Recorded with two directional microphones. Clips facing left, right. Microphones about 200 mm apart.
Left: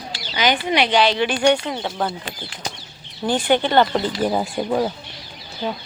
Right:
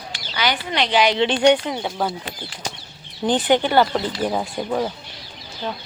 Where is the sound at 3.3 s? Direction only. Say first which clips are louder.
Right 1 dB; 20° right (ahead or behind).